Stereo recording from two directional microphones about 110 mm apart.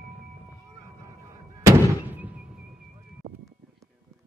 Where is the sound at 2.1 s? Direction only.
15° right (ahead or behind).